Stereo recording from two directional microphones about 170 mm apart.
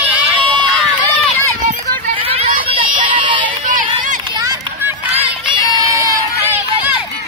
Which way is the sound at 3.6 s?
50° right (ahead or behind).